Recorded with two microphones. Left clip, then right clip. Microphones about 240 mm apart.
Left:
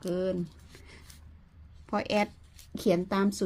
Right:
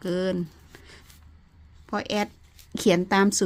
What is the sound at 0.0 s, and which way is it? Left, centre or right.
Speech, right.